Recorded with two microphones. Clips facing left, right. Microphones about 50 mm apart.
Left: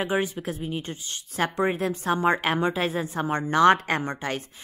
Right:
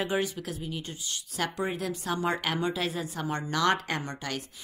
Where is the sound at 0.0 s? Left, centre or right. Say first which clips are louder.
Left 3 dB; left.